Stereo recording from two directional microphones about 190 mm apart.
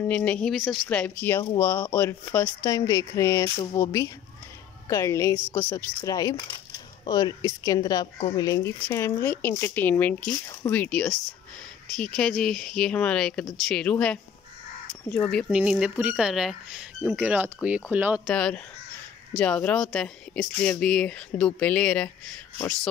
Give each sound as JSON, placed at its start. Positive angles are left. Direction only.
{"t": 0.0, "sound": "a woman's voice", "side_deg": 5}
{"t": 18.3, "sound": "speech", "side_deg": 5}